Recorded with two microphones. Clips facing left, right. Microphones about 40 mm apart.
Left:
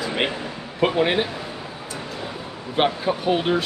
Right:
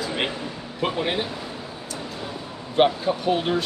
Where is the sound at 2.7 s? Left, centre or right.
Centre.